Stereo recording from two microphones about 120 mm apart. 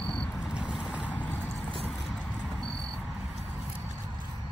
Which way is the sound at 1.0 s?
10° left (ahead or behind).